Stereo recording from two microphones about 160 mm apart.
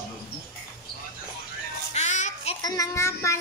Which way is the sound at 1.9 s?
45° left (ahead or behind).